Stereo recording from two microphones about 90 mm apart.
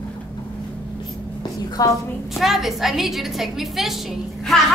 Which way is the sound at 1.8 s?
40° left (ahead or behind).